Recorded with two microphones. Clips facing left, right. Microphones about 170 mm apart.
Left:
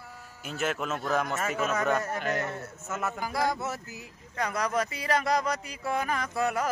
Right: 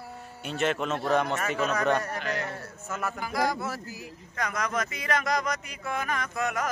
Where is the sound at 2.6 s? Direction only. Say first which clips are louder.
Even; 20° left (ahead or behind).